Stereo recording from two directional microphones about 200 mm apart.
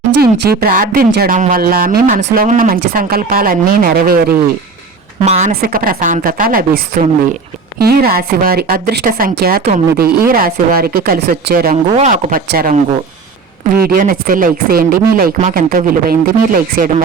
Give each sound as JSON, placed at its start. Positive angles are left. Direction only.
{"t": 0.2, "sound": "speech", "side_deg": -50}
{"t": 5.2, "sound": "speech", "side_deg": -35}
{"t": 5.5, "sound": "speech", "side_deg": -45}
{"t": 13.8, "sound": "speech", "side_deg": -45}